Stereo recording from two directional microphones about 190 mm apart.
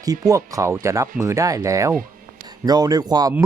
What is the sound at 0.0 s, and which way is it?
Speech, 20° right (ahead or behind).